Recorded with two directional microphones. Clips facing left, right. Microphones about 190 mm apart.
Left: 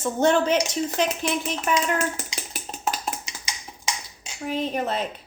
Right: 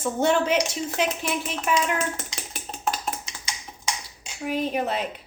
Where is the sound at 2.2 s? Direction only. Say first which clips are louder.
Left 1 dB; 5° left (ahead or behind).